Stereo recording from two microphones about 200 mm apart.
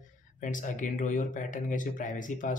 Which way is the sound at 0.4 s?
40° left (ahead or behind).